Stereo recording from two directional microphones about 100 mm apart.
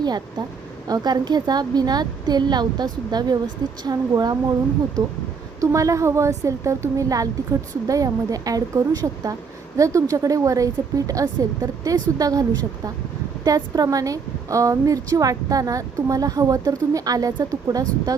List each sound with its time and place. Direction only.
0.0 s a woman's voice: 45° right (ahead or behind)